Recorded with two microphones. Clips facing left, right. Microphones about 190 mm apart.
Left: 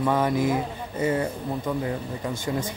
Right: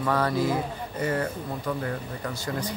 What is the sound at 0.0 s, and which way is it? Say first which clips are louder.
Speech: left 2 dB; 20° left (ahead or behind).